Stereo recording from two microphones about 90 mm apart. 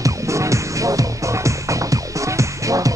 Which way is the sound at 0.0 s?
35° right (ahead or behind).